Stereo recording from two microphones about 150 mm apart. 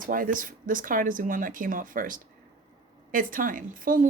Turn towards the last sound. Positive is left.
turn(degrees=-65)  # may be behind; listen again after turning